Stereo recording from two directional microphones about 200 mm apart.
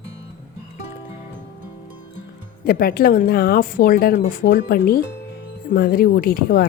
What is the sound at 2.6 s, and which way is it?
Speech, 50° left (ahead or behind).